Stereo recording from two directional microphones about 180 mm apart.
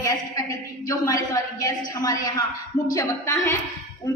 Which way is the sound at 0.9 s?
20° left (ahead or behind).